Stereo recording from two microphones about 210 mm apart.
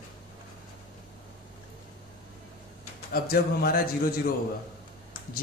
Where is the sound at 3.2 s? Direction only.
45° left (ahead or behind).